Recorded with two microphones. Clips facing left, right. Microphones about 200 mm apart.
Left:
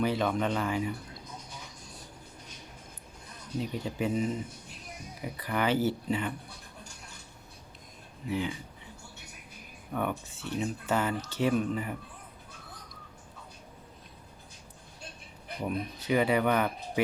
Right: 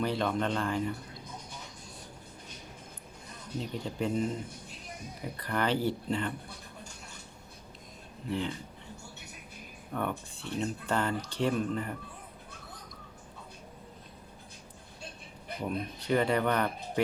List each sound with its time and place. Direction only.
0.0 s speech: 5° left (ahead or behind)
3.6 s speech: 10° left (ahead or behind)
5.4 s speech: 5° left (ahead or behind)
8.3 s speech: 5° left (ahead or behind)
9.9 s speech: 5° left (ahead or behind)
15.6 s speech: 5° left (ahead or behind)